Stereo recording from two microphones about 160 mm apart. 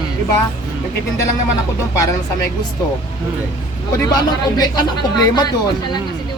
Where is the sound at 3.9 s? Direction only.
25° left (ahead or behind).